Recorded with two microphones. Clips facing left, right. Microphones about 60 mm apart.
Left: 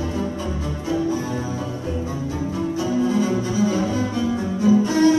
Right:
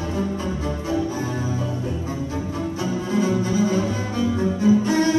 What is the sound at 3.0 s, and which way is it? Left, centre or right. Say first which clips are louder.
Double bass: left 1 dB; right.